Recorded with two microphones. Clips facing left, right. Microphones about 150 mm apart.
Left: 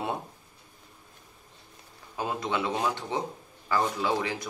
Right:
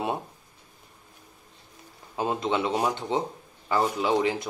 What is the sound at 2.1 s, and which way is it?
Speech, 25° right (ahead or behind).